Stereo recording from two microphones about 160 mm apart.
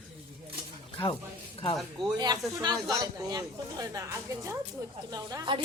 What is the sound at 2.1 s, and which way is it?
A woman's voice, 25° right (ahead or behind).